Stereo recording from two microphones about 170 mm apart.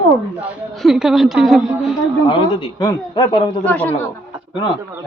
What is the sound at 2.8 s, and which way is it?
Speech, 25° left (ahead or behind).